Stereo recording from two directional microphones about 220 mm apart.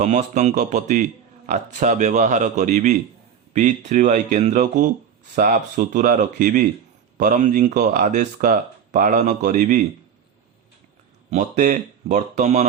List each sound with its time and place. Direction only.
0.0 s speech: 35° right (ahead or behind)
11.3 s speech: 35° right (ahead or behind)